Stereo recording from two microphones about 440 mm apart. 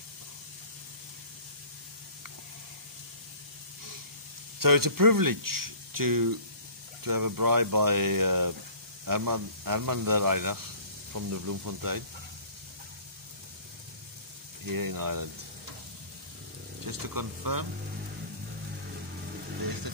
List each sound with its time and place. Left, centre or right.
4.6 s speech: right
14.7 s speech: right
16.8 s speech: right